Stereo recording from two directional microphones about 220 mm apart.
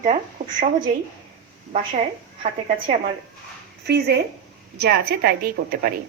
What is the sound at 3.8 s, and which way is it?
A woman's voice, 50° right (ahead or behind).